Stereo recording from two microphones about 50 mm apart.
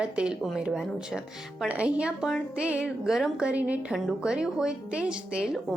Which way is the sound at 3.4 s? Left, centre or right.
Right.